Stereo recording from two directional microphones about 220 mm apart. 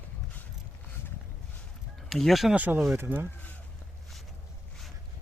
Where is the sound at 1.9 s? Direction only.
Centre (ahead or behind).